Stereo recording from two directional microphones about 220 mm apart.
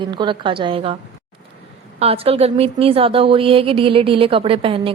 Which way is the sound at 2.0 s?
25° right (ahead or behind).